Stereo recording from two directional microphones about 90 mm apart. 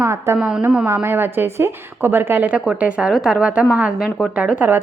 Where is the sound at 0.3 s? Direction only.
10° right (ahead or behind).